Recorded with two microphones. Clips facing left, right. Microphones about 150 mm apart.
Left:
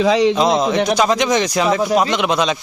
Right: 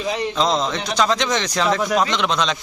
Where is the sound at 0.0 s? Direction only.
90° left.